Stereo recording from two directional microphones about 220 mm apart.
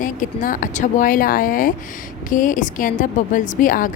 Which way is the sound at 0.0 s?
35° left (ahead or behind).